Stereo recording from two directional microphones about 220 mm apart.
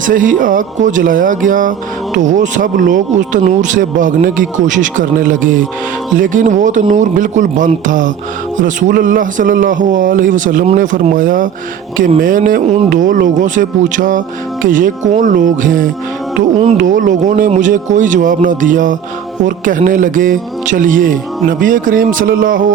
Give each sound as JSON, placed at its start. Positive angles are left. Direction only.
{"t": 0.0, "sound": "speech", "side_deg": -40}
{"t": 16.4, "sound": "music", "side_deg": -25}
{"t": 16.7, "sound": "speech", "side_deg": -35}